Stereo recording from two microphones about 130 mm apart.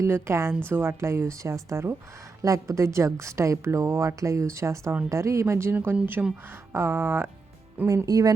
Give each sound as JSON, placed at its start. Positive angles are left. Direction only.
{"t": 0.0, "sound": "a woman's voice", "side_deg": -20}